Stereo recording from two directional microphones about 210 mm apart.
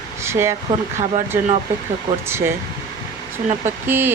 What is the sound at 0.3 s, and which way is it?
Speech, 10° right (ahead or behind).